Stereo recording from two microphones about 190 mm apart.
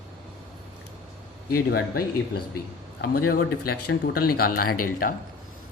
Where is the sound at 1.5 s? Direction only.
55° left (ahead or behind).